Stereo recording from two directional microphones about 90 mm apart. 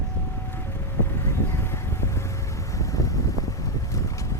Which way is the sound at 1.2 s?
30° left (ahead or behind).